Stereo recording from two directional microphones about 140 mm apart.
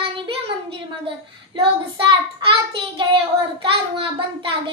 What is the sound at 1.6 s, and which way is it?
Child singing, 40° right (ahead or behind).